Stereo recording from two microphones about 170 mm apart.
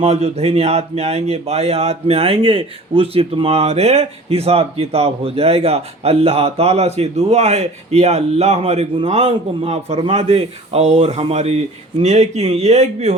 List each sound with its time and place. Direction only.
0.0 s speech: 40° right (ahead or behind)